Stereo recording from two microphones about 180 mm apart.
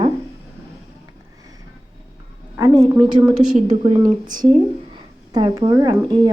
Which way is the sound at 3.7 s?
25° right (ahead or behind).